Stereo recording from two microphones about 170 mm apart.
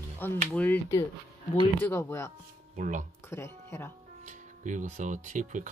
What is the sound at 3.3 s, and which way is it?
Speech, 15° left (ahead or behind).